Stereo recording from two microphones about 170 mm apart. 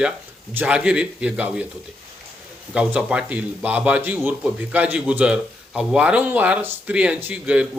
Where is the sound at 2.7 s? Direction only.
5° right (ahead or behind).